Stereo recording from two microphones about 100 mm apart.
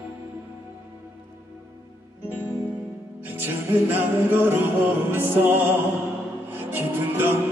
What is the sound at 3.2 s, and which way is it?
Music, 20° right (ahead or behind).